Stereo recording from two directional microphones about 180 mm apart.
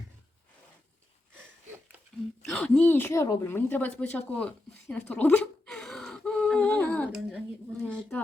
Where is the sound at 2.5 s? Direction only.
5° left (ahead or behind).